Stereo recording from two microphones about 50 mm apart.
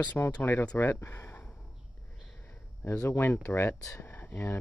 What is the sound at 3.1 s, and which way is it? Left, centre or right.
Speech, left.